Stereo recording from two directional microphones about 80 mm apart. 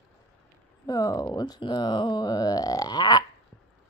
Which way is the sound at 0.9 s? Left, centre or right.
Left.